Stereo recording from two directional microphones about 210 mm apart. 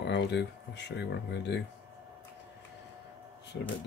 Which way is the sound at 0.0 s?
55° left (ahead or behind).